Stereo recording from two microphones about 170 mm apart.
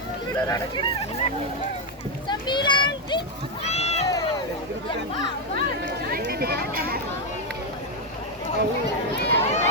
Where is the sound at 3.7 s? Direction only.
40° left (ahead or behind).